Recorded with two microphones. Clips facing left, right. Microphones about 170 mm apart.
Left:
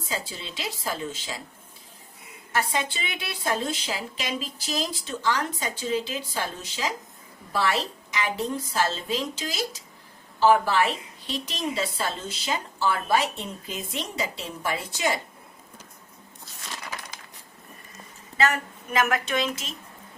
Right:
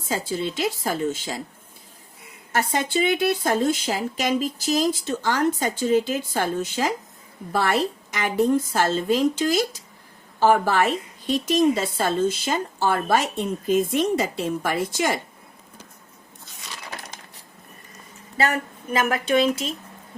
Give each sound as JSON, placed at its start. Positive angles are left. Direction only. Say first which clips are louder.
{"t": 0.1, "sound": "speech", "louder": "right 9 dB", "side_deg": -50}
{"t": 2.5, "sound": "speech", "louder": "right 4 dB", "side_deg": -45}
{"t": 18.9, "sound": "a woman's voice", "louder": "right 4 dB", "side_deg": -30}